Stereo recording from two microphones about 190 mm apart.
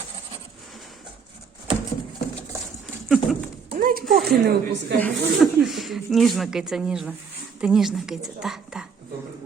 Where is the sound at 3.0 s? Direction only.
Centre (ahead or behind).